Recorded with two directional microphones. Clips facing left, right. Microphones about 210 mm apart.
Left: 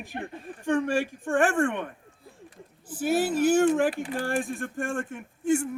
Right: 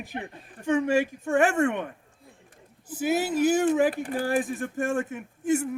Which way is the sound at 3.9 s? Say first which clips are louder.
Right 1 dB; 45° right (ahead or behind).